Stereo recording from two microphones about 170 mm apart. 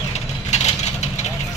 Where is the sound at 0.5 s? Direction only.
40° left (ahead or behind).